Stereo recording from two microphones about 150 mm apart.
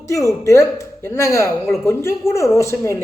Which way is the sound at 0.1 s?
20° left (ahead or behind).